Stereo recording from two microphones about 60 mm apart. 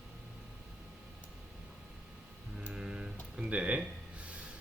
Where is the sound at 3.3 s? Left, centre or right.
Centre.